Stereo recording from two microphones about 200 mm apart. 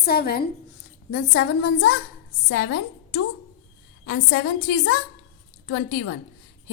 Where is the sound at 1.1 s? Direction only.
60° left (ahead or behind).